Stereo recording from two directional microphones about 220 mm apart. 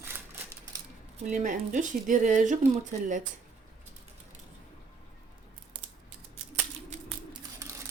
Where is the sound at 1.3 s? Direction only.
35° right (ahead or behind).